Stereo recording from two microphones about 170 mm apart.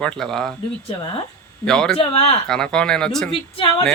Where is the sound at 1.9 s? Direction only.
35° left (ahead or behind).